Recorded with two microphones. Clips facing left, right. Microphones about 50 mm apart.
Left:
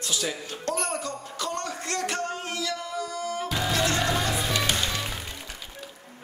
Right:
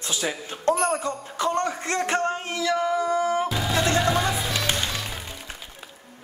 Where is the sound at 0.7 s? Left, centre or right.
Centre.